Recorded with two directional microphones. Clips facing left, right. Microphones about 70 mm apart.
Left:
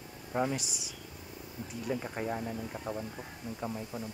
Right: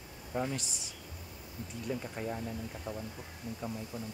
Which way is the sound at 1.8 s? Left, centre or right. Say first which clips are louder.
Left 3 dB; left.